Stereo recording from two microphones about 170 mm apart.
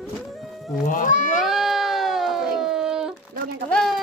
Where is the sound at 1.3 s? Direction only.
Centre (ahead or behind).